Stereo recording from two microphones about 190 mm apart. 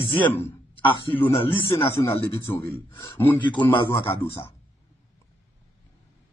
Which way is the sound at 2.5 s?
20° left (ahead or behind).